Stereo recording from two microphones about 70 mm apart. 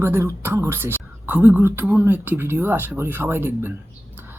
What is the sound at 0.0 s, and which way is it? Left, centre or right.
Speech, right.